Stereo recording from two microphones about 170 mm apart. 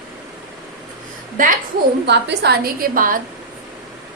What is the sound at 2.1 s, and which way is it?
A woman's voice, 80° right.